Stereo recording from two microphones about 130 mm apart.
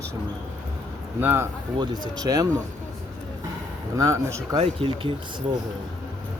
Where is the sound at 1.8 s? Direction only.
30° right (ahead or behind).